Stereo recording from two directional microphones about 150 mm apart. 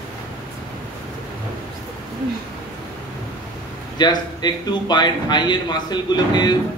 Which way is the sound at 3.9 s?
30° left (ahead or behind).